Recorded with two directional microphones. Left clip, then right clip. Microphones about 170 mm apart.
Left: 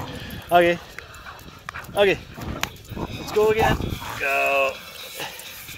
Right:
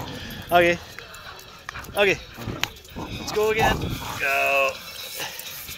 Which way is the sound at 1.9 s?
35° left (ahead or behind).